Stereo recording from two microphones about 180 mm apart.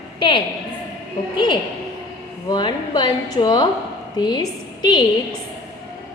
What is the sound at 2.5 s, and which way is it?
A woman's voice, 25° left (ahead or behind).